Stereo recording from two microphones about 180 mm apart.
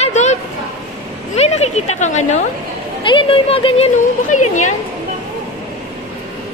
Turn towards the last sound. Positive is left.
turn(degrees=40)  # may be behind; listen again after turning